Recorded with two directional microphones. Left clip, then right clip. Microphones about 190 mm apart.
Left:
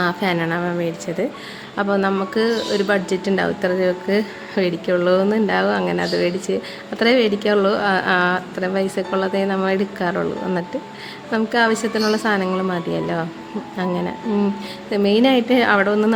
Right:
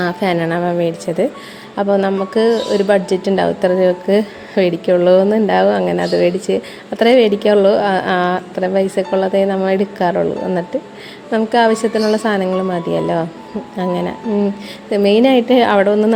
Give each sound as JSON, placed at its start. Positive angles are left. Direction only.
{"t": 0.0, "sound": "speech", "side_deg": -15}